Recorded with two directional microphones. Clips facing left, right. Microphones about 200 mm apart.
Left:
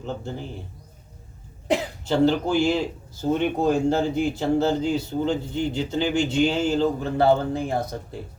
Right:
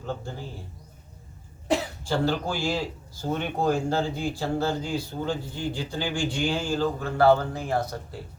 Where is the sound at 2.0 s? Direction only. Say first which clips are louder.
Left 6 dB; 20° left (ahead or behind).